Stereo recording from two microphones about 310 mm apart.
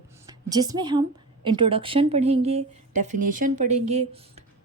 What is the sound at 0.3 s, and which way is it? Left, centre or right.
A woman's voice, centre.